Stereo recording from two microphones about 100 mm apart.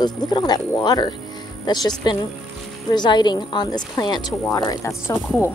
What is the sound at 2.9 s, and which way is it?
Speech, 50° left (ahead or behind).